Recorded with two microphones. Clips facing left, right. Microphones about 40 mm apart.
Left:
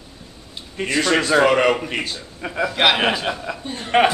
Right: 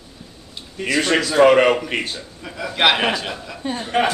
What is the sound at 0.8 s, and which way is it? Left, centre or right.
Speech, left.